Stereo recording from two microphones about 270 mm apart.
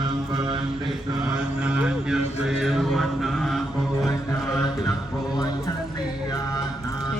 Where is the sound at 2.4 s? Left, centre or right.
Centre.